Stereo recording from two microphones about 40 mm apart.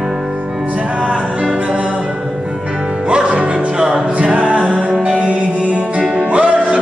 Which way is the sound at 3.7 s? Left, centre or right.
Centre.